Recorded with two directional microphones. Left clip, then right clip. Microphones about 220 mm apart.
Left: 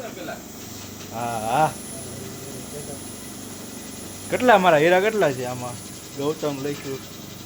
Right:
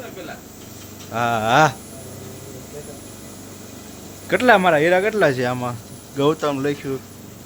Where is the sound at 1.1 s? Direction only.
30° right (ahead or behind).